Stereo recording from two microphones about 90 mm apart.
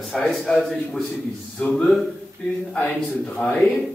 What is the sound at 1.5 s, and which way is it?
Speech, 10° left (ahead or behind).